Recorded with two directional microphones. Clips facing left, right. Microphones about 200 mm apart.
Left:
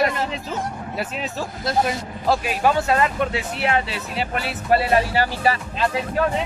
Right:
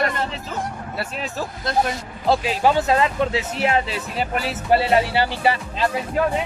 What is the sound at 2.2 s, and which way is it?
Speech, 20° right (ahead or behind).